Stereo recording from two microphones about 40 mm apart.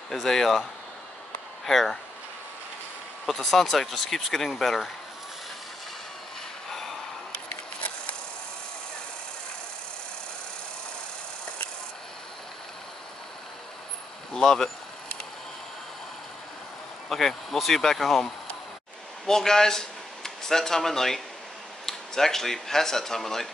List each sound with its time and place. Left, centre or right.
0.1 s speech: centre
3.3 s speech: centre
6.7 s a sound: centre
7.3 s a sound: left
14.3 s speech: centre
17.1 s speech: centre
19.2 s speech: centre